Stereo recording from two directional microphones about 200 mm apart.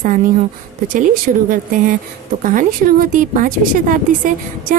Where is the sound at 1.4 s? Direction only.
45° right (ahead or behind).